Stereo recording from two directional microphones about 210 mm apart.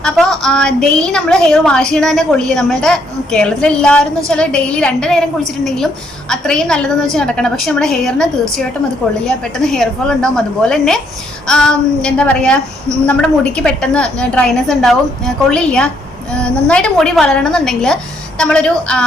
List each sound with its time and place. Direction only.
0.0 s a woman's voice: centre (ahead or behind)